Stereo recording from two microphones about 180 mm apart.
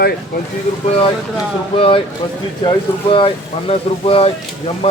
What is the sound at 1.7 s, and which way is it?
Speech, 30° left (ahead or behind).